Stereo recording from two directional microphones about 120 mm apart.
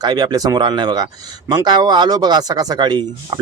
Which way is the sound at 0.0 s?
35° right (ahead or behind).